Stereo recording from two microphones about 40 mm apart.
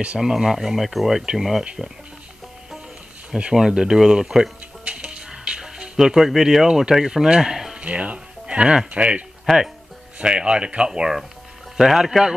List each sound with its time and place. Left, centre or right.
0.2 s speech: centre
3.3 s speech: right
4.8 s music: right; by 7.1 s centre
7.1 s speech: centre
7.8 s speech: right
9.5 s speech: centre
10.1 s speech: right